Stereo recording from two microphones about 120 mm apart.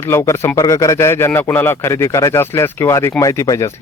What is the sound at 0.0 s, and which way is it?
Speech, 20° left (ahead or behind).